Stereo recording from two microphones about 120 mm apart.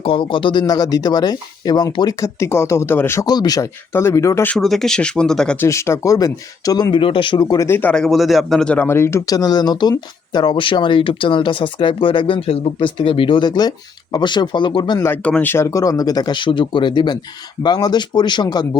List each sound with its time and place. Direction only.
0.0 s speech: 50° left (ahead or behind)
0.7 s speech: 35° left (ahead or behind)
3.2 s speech: 35° left (ahead or behind)
4.4 s speech: 5° left (ahead or behind)
5.5 s speech: 25° left (ahead or behind)
6.9 s speech: 45° left (ahead or behind)
7.7 s speech: 15° left (ahead or behind); by 15.0 s 40° left (ahead or behind)
15.0 s speech: 15° left (ahead or behind); by 18.8 s 35° left (ahead or behind)